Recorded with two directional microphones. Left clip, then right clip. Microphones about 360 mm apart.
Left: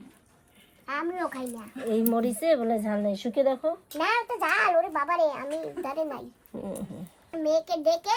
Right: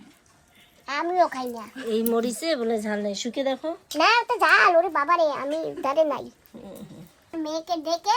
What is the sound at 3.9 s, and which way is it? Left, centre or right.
A child's voice, centre.